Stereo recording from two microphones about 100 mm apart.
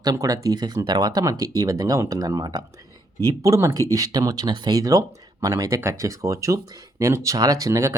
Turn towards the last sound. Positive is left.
turn(degrees=-30)  # may be behind; listen again after turning